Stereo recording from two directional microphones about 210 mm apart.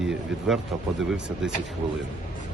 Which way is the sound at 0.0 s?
Centre (ahead or behind).